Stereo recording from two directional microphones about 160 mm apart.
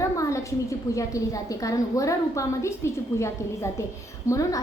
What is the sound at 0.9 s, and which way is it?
A woman's voice, 20° left (ahead or behind).